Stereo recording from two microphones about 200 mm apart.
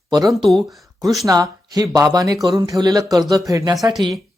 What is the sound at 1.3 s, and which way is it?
Speech, 20° right (ahead or behind).